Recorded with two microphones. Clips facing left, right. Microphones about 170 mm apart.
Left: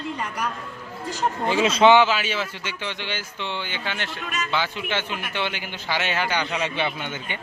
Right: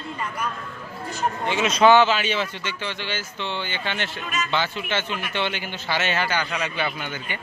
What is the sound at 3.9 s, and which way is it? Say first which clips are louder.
Speech: right 2 dB; centre (ahead or behind).